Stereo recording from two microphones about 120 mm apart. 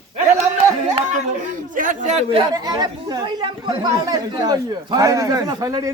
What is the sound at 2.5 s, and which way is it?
Speech, 35° right (ahead or behind).